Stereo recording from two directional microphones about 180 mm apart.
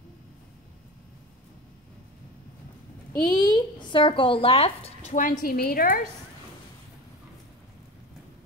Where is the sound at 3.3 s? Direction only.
20° left (ahead or behind); by 5.3 s 45° left (ahead or behind).